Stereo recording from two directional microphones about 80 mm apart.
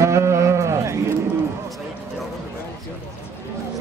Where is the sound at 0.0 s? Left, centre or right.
Right.